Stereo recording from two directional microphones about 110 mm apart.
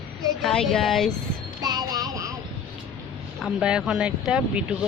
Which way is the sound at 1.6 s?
35° right (ahead or behind).